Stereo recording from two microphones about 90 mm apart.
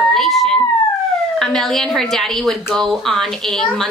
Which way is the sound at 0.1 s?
Centre (ahead or behind).